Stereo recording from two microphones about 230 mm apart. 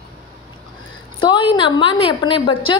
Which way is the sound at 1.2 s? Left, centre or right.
Left.